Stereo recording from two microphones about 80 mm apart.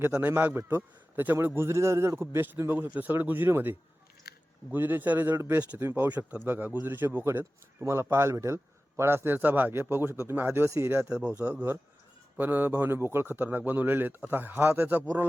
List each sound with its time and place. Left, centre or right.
0.2 s a man's voice: right
10.9 s a man's voice: centre